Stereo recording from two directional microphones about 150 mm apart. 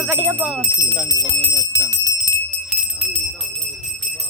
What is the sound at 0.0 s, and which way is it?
Speech, 10° right (ahead or behind).